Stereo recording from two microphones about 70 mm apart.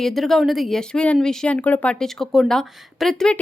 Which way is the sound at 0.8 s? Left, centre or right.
Centre.